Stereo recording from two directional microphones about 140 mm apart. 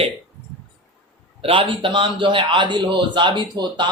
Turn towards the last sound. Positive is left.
turn(degrees=-30)  # may be behind; listen again after turning